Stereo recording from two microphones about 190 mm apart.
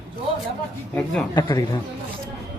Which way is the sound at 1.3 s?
20° left (ahead or behind).